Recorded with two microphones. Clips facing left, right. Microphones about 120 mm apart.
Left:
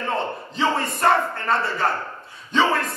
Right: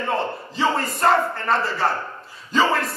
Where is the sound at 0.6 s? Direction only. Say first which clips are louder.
Right 1 dB; centre (ahead or behind).